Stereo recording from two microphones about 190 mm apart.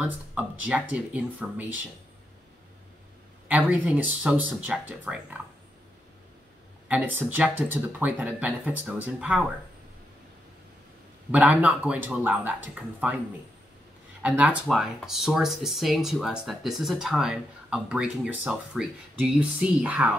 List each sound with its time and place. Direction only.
0.0 s speech: 5° right (ahead or behind)
3.4 s speech: 10° right (ahead or behind)
6.9 s speech: 10° right (ahead or behind)
11.3 s speech: 5° right (ahead or behind)
14.2 s speech: 5° right (ahead or behind)